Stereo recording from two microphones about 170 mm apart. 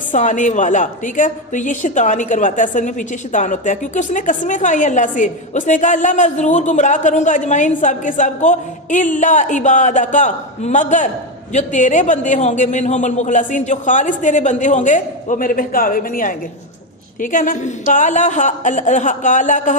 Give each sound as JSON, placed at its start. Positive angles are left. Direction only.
{"t": 0.1, "sound": "a woman's voice", "side_deg": 45}